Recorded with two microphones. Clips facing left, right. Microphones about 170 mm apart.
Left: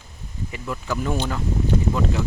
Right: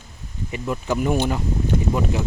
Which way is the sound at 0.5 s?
20° right (ahead or behind).